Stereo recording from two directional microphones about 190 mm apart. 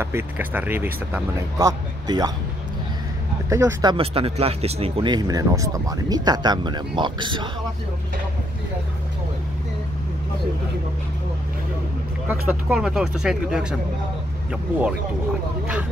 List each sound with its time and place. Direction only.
0.0 s speech: 10° right (ahead or behind)
3.4 s speech: 15° right (ahead or behind)
3.9 s speech: 30° right (ahead or behind)
12.3 s speech: 5° right (ahead or behind)